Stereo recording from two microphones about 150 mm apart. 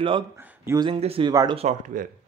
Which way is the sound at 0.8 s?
40° right (ahead or behind).